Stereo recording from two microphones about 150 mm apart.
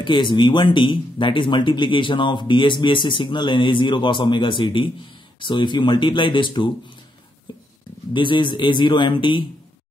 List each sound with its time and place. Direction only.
0.0 s speech: 30° left (ahead or behind)
8.1 s speech: 35° left (ahead or behind)